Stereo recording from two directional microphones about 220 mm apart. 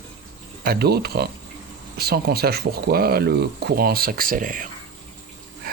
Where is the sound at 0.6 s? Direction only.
45° right (ahead or behind).